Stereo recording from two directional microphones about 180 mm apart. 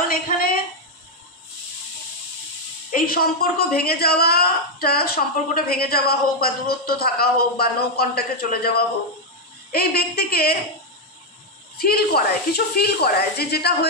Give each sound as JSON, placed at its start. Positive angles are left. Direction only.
{"t": 0.1, "sound": "a sound", "side_deg": 55}
{"t": 2.9, "sound": "speech", "side_deg": 55}
{"t": 11.7, "sound": "speech", "side_deg": 60}